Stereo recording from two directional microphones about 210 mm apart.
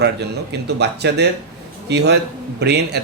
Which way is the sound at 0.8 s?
55° right (ahead or behind).